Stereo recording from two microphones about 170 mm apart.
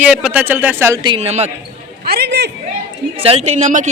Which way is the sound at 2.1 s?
70° right (ahead or behind).